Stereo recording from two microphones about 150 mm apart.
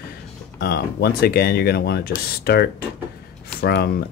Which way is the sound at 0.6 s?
90° left.